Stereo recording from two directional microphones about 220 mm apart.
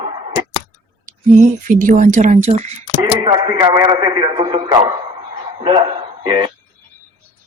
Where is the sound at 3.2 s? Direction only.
20° right (ahead or behind).